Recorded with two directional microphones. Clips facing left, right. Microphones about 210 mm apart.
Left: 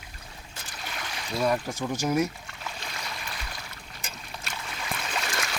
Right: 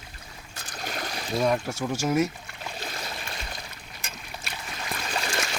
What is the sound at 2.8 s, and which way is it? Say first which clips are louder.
Stream: right 3 dB; 30° right (ahead or behind).